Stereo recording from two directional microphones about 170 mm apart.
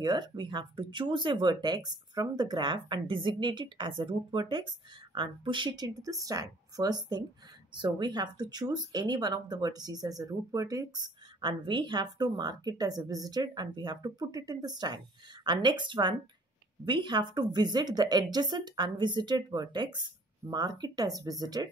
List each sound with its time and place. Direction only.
0.0 s speech: 25° right (ahead or behind)